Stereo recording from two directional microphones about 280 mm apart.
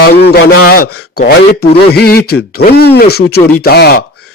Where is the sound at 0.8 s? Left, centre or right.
Left.